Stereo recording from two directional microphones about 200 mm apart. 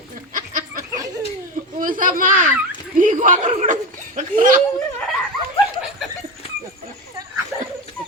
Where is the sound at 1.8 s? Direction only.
40° right (ahead or behind).